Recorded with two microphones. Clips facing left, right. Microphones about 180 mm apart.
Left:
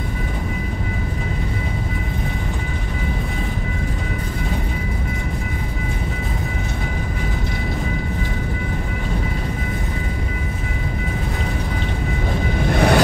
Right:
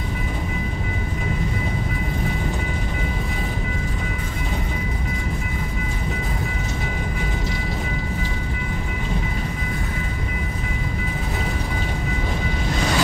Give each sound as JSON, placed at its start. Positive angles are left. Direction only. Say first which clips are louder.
{"t": 12.6, "sound": "vehicle", "louder": "left 8 dB", "side_deg": 60}